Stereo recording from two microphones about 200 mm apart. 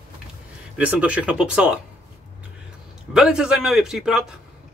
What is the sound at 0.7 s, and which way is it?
A man's voice, 5° right (ahead or behind).